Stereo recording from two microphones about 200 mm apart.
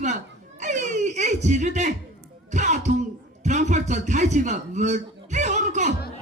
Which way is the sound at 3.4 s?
35° right (ahead or behind).